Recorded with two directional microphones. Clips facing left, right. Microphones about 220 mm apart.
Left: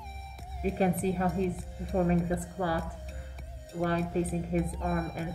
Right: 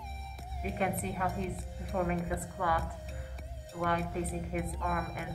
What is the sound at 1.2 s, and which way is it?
Speech, centre (ahead or behind).